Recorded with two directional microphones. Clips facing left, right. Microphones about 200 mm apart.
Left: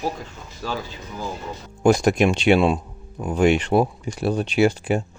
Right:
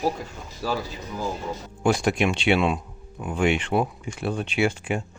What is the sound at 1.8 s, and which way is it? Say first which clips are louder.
Speech: left 5 dB; 45° left (ahead or behind).